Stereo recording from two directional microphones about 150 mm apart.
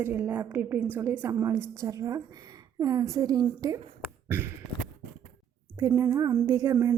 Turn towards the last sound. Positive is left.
turn(degrees=-20)  # may be behind; listen again after turning